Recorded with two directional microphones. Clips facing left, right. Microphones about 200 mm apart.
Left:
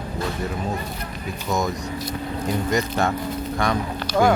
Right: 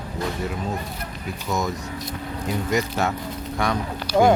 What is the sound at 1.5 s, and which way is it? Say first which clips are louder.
Speech: left 2 dB; centre (ahead or behind).